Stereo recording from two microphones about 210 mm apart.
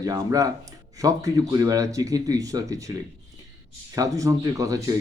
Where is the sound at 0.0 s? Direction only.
15° right (ahead or behind).